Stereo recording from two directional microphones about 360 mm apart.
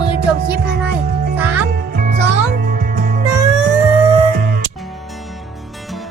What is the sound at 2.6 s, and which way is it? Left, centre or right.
Music, right.